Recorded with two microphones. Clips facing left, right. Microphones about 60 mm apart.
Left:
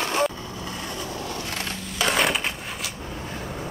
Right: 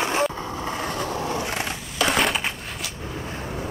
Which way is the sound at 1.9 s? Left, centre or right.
Centre.